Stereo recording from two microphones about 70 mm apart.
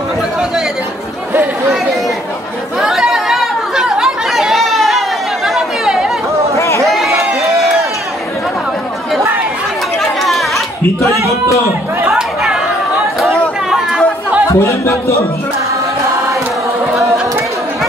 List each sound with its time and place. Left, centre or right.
1.3 s chatter: right
2.8 s chatter: centre
6.5 s a sound: left
6.8 s run: centre
10.2 s chatter: centre
12.1 s chatter: centre
13.7 s chatter: centre
14.5 s speech: left
16.9 s a sound: centre